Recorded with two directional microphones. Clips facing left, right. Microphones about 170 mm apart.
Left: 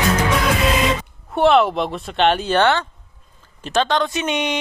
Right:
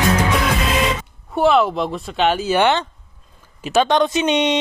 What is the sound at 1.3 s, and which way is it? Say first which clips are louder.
A woman's voice: left 1 dB; centre (ahead or behind).